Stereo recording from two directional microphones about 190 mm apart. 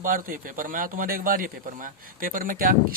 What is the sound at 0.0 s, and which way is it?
A man's voice, 45° right (ahead or behind).